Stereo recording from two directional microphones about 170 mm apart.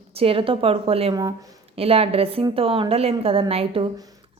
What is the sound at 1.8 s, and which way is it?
A woman's voice, 35° right (ahead or behind).